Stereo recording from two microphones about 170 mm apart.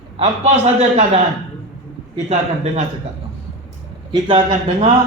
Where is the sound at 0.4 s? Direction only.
45° right (ahead or behind).